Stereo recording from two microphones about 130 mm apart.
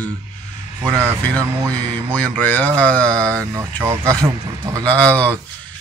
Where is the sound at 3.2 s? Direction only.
25° right (ahead or behind).